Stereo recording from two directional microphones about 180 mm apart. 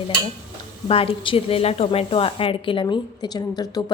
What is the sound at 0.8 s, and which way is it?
A woman's voice, 30° left (ahead or behind).